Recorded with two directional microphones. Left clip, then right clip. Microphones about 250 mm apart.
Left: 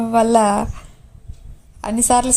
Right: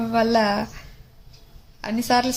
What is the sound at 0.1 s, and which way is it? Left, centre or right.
A woman's voice, left.